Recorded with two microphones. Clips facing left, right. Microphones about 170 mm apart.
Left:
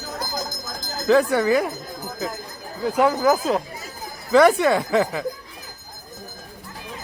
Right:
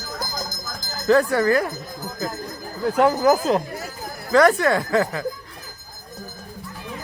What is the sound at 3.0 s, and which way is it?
Speech, 5° right (ahead or behind).